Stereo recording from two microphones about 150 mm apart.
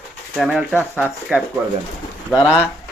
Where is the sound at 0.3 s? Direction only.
5° right (ahead or behind).